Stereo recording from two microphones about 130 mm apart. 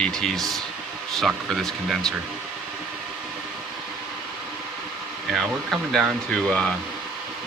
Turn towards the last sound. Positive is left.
turn(degrees=5)  # may be behind; listen again after turning